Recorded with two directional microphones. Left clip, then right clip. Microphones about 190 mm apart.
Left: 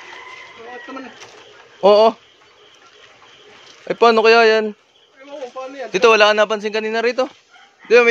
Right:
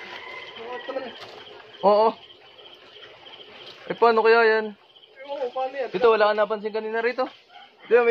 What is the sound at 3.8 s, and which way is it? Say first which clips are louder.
Speech: left 6 dB; 90° left.